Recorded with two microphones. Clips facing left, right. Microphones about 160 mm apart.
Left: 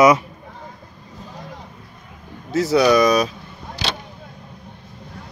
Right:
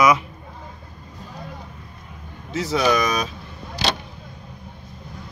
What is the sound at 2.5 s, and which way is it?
Speech, 40° left (ahead or behind).